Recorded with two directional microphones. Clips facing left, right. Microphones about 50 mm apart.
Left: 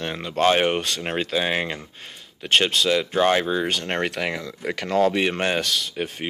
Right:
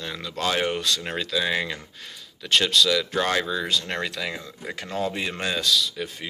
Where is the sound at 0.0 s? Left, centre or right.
Left.